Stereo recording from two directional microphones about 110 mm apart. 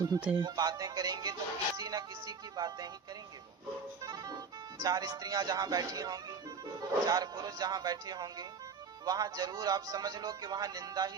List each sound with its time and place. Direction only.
0.4 s speech: 35° right (ahead or behind)
4.0 s speech: 35° right (ahead or behind)